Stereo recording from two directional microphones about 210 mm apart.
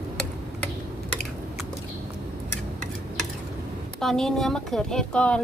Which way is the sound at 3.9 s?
Centre (ahead or behind).